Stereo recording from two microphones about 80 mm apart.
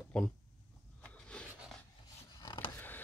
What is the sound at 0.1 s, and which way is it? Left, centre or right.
Speech, centre.